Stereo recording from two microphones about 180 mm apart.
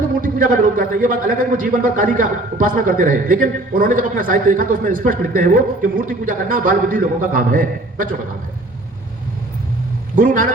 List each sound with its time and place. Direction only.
0.2 s a man's voice: 50° right (ahead or behind)
10.2 s a man's voice: 50° right (ahead or behind)